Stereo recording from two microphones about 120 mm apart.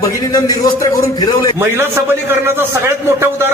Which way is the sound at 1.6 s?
20° right (ahead or behind).